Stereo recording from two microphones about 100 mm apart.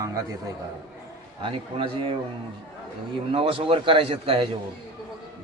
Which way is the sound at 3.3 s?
65° right (ahead or behind).